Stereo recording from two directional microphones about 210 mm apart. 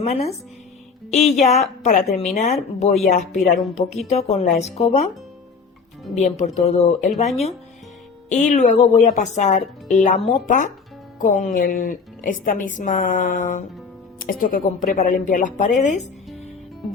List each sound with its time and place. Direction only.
0.0 s speech: 30° left (ahead or behind)
6.1 s speech: 35° left (ahead or behind)
8.3 s speech: 35° left (ahead or behind)